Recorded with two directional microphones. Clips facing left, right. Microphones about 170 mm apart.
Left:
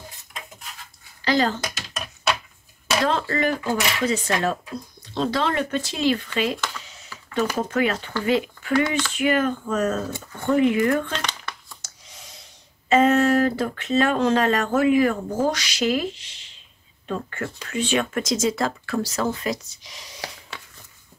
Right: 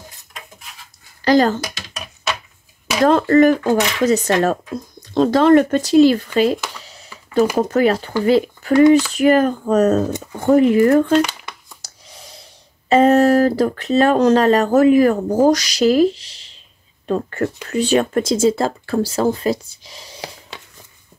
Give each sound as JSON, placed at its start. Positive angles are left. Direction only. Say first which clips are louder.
{"t": 1.2, "sound": "speech", "louder": "right 8 dB", "side_deg": -45}
{"t": 3.0, "sound": "speech", "louder": "right 12 dB", "side_deg": -50}
{"t": 11.1, "sound": "crumpling", "louder": "right 14 dB", "side_deg": -10}
{"t": 12.9, "sound": "speech", "louder": "right 5 dB", "side_deg": -35}
{"t": 20.2, "sound": "a sound", "louder": "right 3 dB", "side_deg": -20}